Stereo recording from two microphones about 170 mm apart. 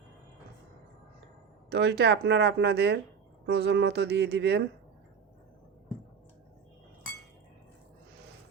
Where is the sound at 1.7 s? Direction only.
80° right.